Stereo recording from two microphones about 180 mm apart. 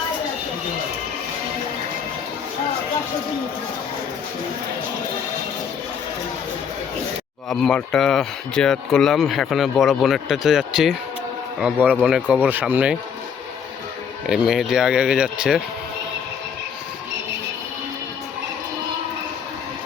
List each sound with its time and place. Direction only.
7.5 s speech: 5° left (ahead or behind)
14.3 s speech: 5° right (ahead or behind)